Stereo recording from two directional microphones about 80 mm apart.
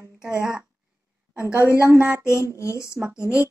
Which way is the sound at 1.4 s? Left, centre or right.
Left.